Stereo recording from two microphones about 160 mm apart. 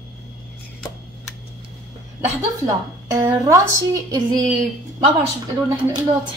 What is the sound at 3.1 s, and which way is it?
Speech, 25° right (ahead or behind).